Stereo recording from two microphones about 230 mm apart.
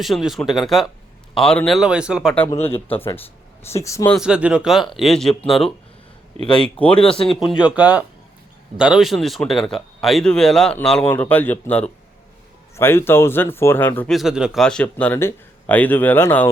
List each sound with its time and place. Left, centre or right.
0.0 s speech: centre
2.6 s speech: left
2.9 s speech: centre
4.1 s speech: centre